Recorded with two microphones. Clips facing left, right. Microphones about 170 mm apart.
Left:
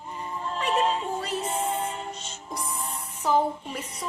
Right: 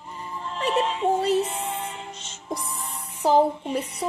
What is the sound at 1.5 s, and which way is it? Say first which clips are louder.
Music: left 3 dB; 40° left (ahead or behind).